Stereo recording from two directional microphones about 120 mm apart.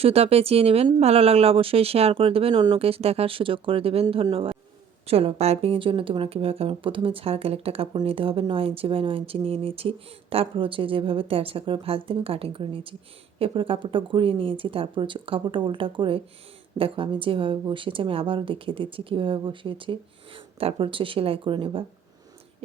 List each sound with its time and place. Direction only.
0.0 s a woman's voice: 55° right (ahead or behind)